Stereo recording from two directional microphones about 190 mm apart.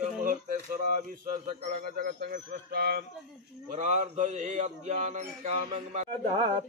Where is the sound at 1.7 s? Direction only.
45° right (ahead or behind).